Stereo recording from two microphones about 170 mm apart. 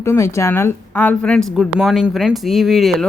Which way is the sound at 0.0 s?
15° left (ahead or behind).